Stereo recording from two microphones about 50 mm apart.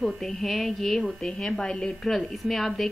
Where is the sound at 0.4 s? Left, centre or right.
Centre.